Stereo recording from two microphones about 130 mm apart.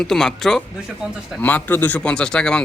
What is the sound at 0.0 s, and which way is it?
Speech, 5° left (ahead or behind).